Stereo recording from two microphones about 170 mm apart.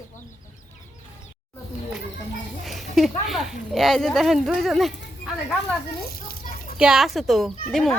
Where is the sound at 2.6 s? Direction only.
Centre (ahead or behind).